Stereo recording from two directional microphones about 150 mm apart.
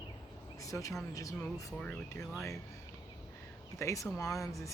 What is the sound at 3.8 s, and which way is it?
Speech, 20° left (ahead or behind).